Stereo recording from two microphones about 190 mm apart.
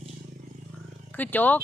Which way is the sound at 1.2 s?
10° left (ahead or behind).